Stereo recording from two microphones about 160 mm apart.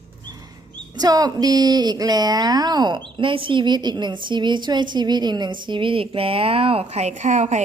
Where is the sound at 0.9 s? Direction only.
25° right (ahead or behind).